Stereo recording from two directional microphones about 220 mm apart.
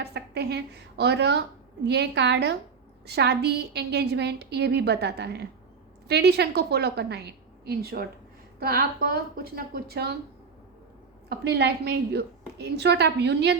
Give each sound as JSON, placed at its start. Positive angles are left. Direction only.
{"t": 0.0, "sound": "a woman's voice", "side_deg": -50}
{"t": 11.3, "sound": "a woman's voice", "side_deg": -50}